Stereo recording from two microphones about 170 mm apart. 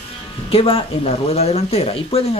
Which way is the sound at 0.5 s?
35° left (ahead or behind).